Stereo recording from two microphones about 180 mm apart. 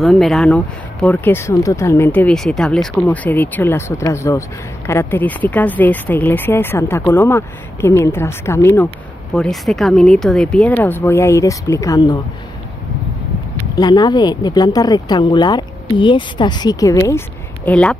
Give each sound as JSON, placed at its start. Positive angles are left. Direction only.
{"t": 0.0, "sound": "speech", "side_deg": 0}
{"t": 13.7, "sound": "speech", "side_deg": 25}